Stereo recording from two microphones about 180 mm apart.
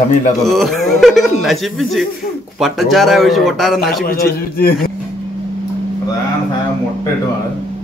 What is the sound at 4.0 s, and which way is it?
Speech, 60° left (ahead or behind).